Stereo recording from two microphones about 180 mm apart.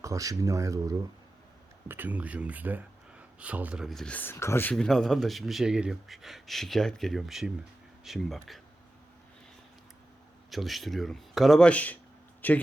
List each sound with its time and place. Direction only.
0.0 s speech: 20° right (ahead or behind); by 4.7 s 15° left (ahead or behind)
4.7 s speech: centre (ahead or behind)
10.5 s a man's voice: centre (ahead or behind)